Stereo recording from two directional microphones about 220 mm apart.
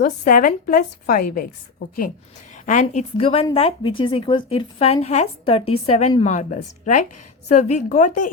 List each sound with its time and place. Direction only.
0.0 s a woman's voice: 40° left (ahead or behind)
2.6 s a woman's voice: 35° left (ahead or behind)